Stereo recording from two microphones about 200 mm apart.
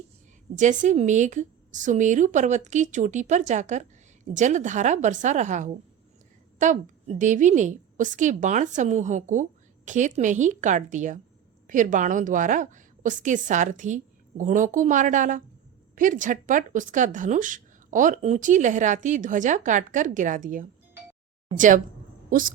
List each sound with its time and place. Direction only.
0.5 s speech: 40° right (ahead or behind)
22.3 s a woman's voice: 45° right (ahead or behind)